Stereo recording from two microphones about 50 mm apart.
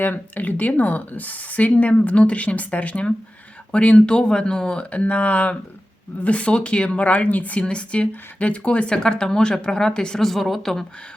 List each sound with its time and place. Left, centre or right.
0.0 s speech: left; by 10.2 s centre
10.2 s speech: centre